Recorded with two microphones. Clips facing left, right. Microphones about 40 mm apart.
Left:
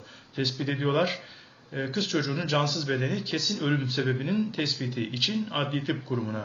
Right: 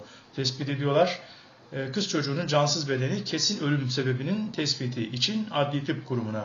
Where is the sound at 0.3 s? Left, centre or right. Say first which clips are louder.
Left 1 dB; left.